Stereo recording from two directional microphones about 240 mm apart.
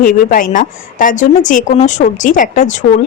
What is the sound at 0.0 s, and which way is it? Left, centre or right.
A woman's voice, left.